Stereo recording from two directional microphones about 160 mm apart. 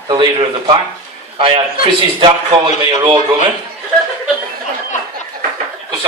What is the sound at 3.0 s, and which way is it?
Speech, 30° right (ahead or behind).